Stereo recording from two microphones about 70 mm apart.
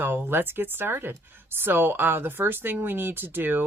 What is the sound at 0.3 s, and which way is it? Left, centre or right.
Speech, right.